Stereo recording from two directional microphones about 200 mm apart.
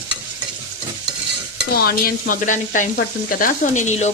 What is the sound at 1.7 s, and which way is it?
Stir, 50° left (ahead or behind).